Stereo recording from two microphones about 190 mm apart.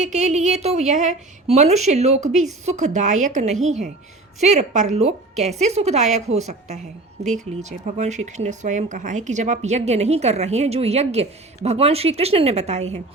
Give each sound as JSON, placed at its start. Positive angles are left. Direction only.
{"t": 0.0, "sound": "speech", "side_deg": -40}